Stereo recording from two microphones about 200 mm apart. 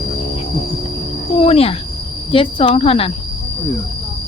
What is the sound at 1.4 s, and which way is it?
Speech, 30° left (ahead or behind).